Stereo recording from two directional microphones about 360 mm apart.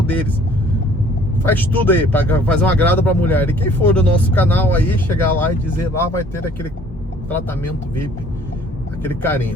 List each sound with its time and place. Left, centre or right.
0.1 s speech: centre
1.5 s speech: centre
7.3 s speech: centre
9.0 s speech: centre